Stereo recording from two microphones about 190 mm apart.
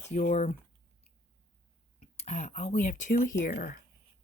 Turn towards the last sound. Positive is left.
turn(degrees=50)  # may be behind; listen again after turning